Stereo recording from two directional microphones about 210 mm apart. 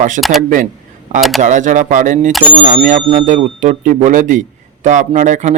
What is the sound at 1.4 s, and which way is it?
Speech, 35° right (ahead or behind).